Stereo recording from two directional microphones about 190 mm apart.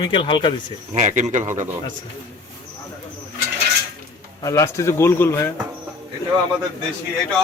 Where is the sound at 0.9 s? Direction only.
40° right (ahead or behind).